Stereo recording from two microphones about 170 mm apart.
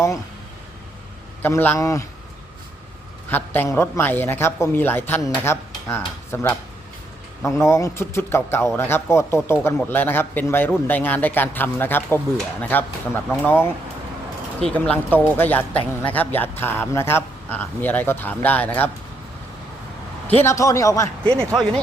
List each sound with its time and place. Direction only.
1.4 s speech: 10° left (ahead or behind)
3.2 s speech: 10° left (ahead or behind)
20.2 s speech: 10° left (ahead or behind)